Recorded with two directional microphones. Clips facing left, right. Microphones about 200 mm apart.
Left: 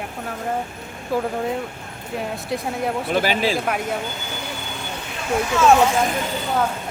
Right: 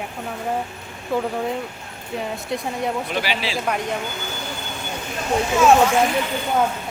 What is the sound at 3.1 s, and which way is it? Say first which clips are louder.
Speech: left 5 dB; 45° left (ahead or behind).